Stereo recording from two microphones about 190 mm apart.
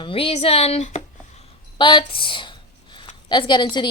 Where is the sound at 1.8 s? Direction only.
25° left (ahead or behind).